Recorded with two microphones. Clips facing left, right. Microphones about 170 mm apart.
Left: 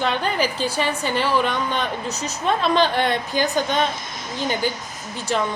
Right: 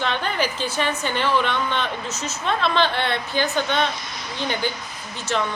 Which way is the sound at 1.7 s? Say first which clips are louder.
Left 1 dB; 40° left (ahead or behind).